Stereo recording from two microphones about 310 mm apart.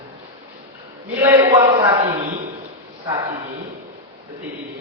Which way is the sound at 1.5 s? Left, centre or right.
Centre.